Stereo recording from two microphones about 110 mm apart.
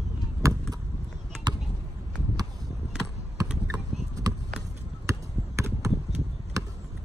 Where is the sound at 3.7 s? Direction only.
30° right (ahead or behind).